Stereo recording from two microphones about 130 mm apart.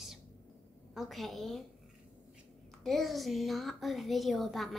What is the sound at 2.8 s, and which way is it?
A woman's voice, centre (ahead or behind).